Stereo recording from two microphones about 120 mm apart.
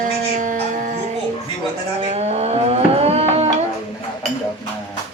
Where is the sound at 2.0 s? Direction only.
65° right (ahead or behind).